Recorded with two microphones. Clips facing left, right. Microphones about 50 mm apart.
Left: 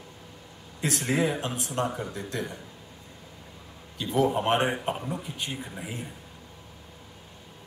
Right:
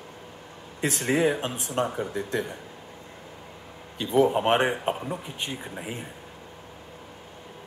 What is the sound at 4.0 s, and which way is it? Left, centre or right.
Speech, right.